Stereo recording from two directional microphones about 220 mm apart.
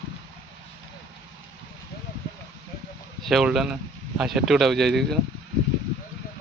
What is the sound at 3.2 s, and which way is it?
A man's voice, centre (ahead or behind).